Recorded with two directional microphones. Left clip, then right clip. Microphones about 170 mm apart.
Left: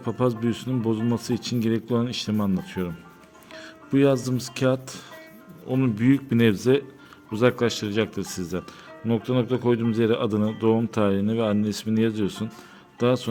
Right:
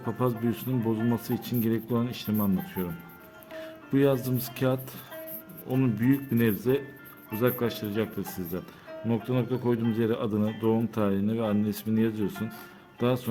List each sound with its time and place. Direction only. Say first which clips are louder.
0.0 s speech: left 4 dB; 25° left (ahead or behind)